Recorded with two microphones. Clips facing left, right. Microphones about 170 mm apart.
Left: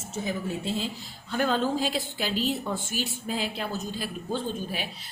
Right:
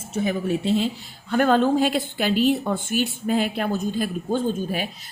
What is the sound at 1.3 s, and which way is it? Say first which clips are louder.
A woman's voice: right 7 dB; 55° right (ahead or behind).